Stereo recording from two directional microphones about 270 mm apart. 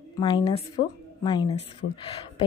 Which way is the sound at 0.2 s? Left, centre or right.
Centre.